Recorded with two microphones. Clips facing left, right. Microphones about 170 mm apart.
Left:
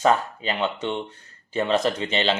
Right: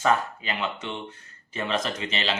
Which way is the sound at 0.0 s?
30° left (ahead or behind).